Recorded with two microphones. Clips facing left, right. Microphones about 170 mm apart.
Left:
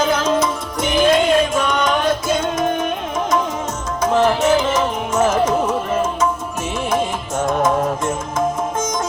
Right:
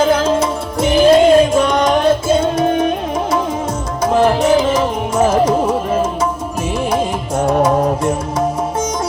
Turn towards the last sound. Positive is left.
turn(degrees=-35)  # may be behind; listen again after turning